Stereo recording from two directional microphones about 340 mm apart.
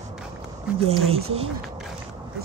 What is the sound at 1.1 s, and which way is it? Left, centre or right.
Speech, centre.